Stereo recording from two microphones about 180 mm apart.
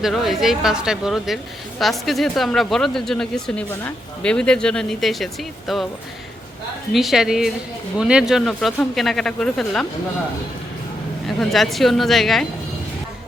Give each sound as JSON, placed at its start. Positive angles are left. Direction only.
{"t": 0.0, "sound": "speech", "side_deg": 0}
{"t": 6.9, "sound": "speech", "side_deg": 0}
{"t": 11.3, "sound": "speech", "side_deg": 0}